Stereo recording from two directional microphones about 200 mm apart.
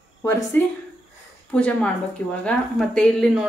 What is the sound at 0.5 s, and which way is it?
Speech, 10° left (ahead or behind).